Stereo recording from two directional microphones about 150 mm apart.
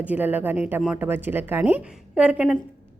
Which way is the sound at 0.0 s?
10° right (ahead or behind).